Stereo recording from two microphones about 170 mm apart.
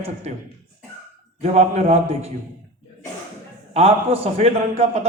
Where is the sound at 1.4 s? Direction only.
40° right (ahead or behind).